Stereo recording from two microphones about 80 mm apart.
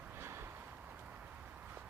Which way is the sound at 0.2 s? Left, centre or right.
Right.